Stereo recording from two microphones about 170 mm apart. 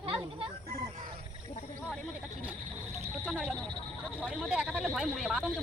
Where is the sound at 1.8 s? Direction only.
5° right (ahead or behind).